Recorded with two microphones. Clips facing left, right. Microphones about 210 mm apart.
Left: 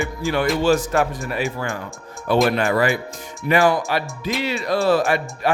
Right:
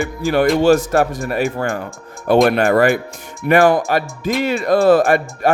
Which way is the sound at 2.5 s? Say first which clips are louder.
Right 5 dB; 55° right (ahead or behind).